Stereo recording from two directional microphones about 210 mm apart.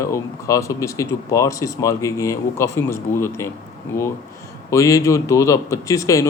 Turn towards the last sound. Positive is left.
turn(degrees=15)  # may be behind; listen again after turning